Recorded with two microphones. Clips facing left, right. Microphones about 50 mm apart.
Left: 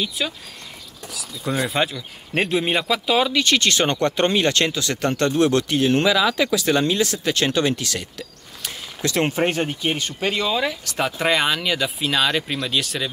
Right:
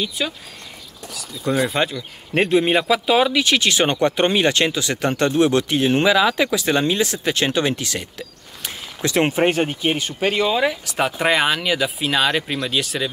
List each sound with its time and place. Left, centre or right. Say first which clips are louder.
0.2 s speech: right 1 dB; centre